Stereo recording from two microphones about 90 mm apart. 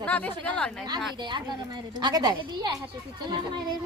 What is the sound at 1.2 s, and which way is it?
A woman's voice, 55° right (ahead or behind).